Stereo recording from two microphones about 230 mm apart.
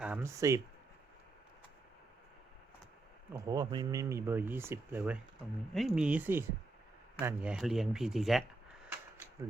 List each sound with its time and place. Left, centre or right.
0.0 s speech: centre
3.3 s speech: centre